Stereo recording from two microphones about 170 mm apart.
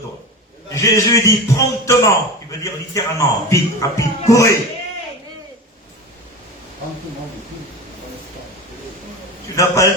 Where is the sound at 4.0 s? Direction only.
20° left (ahead or behind).